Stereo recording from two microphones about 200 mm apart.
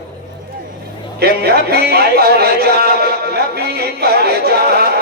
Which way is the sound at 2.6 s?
50° right (ahead or behind).